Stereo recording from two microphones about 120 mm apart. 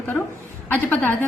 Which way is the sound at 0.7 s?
15° left (ahead or behind).